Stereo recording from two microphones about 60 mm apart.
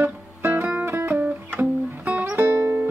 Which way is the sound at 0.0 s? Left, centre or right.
Right.